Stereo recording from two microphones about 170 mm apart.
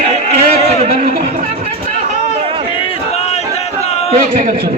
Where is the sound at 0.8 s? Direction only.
50° right (ahead or behind).